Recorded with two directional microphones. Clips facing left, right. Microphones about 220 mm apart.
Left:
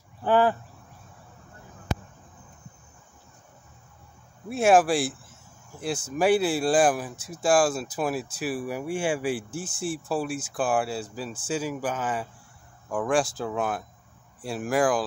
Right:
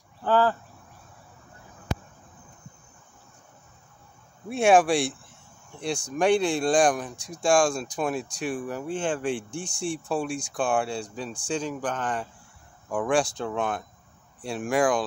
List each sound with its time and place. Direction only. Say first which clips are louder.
0.2 s speech: left 1 dB; 15° left (ahead or behind)
4.5 s speech: even; centre (ahead or behind)